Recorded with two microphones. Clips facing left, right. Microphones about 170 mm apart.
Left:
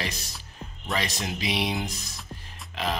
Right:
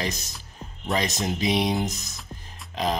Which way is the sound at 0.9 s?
20° right (ahead or behind).